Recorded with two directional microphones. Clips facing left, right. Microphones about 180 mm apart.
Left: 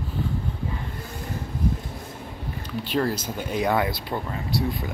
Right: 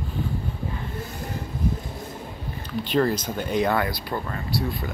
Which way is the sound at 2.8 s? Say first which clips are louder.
Right 3 dB; 5° left (ahead or behind).